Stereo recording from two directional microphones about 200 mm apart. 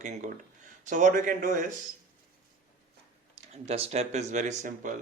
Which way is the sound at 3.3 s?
30° right (ahead or behind).